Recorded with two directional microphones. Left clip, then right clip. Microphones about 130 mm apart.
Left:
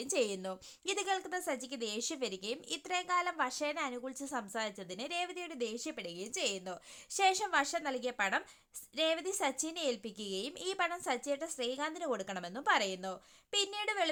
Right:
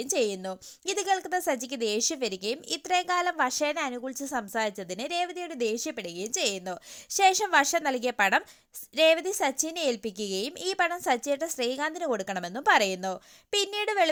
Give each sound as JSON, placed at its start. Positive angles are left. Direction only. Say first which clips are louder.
{"t": 0.0, "sound": "a woman's voice", "louder": "right 6 dB", "side_deg": -25}
{"t": 5.5, "sound": "a woman's voice", "louder": "right 11 dB", "side_deg": -45}